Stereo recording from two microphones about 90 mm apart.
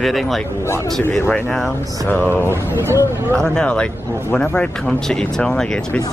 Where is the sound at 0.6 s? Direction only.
30° left (ahead or behind).